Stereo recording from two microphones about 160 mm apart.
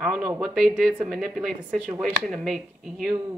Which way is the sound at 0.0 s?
5° right (ahead or behind).